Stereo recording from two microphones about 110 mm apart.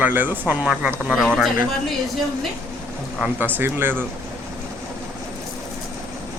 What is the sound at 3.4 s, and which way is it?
Speech, 20° right (ahead or behind).